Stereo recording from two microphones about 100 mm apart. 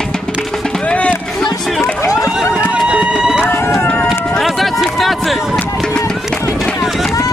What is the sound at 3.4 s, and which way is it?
Run, 25° left (ahead or behind).